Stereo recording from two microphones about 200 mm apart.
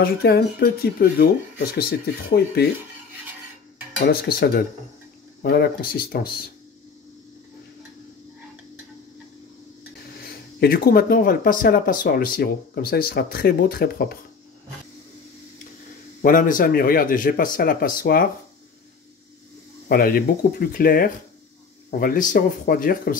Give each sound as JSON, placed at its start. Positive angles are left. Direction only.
{"t": 0.0, "sound": "speech", "side_deg": 50}
{"t": 4.0, "sound": "speech", "side_deg": 50}
{"t": 10.2, "sound": "speech", "side_deg": 50}
{"t": 16.2, "sound": "speech", "side_deg": 45}
{"t": 19.9, "sound": "speech", "side_deg": 50}